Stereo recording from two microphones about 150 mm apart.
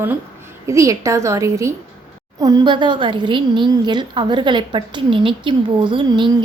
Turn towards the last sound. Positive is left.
turn(degrees=-30)  # may be behind; listen again after turning